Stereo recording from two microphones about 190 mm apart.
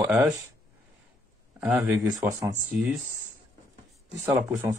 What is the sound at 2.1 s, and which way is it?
Speech, 20° right (ahead or behind).